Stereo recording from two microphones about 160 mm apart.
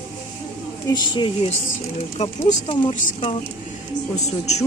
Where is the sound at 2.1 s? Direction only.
40° left (ahead or behind).